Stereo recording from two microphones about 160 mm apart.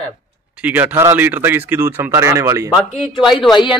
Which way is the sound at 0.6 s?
10° right (ahead or behind).